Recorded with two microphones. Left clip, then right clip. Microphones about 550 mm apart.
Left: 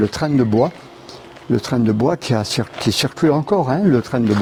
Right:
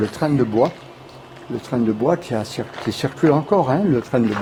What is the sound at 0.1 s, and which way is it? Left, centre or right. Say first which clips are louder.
Speech: left 2 dB; left.